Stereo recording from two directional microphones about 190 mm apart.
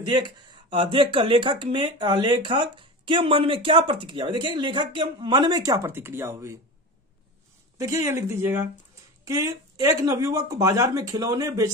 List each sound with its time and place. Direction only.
0.7 s speech: 25° right (ahead or behind)
7.7 s speech: 15° right (ahead or behind)